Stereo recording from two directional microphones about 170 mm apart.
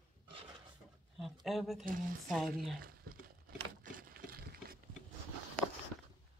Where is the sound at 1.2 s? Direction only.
Centre (ahead or behind).